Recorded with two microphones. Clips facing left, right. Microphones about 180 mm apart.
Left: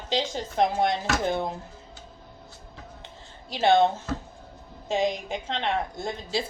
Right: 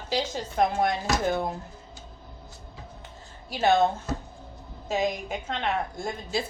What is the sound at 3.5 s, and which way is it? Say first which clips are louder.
Speech: left 2 dB; 25° left (ahead or behind).